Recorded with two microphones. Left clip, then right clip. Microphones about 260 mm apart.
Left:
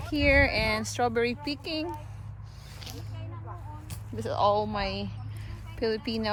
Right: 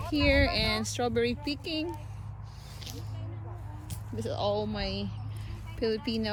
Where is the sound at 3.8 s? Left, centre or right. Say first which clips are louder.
Left 2 dB; centre.